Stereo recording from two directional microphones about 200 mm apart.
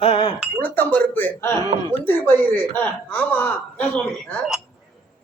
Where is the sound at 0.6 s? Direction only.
10° left (ahead or behind).